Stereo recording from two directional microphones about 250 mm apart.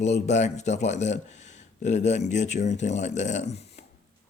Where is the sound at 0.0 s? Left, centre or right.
Left.